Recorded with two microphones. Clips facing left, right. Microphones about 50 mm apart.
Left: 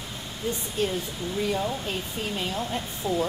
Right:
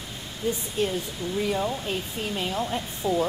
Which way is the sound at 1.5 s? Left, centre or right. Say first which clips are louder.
Right 1 dB; centre.